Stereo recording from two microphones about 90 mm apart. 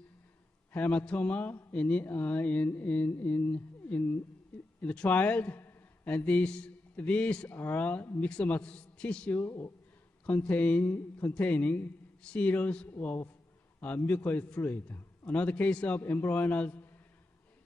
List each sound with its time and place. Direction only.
0.7 s a man's voice: 15° left (ahead or behind)
9.4 s speech: 30° left (ahead or behind)
10.2 s speech: 15° left (ahead or behind)